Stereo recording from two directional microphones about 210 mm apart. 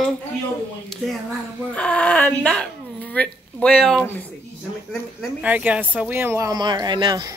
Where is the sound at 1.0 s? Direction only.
Centre (ahead or behind).